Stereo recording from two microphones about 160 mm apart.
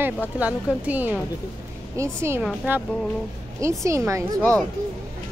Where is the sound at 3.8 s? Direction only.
20° right (ahead or behind).